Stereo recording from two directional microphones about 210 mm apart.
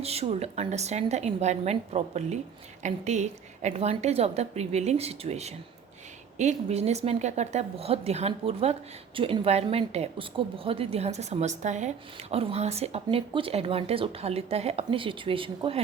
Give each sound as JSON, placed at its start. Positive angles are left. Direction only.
{"t": 0.0, "sound": "a woman's voice", "side_deg": -30}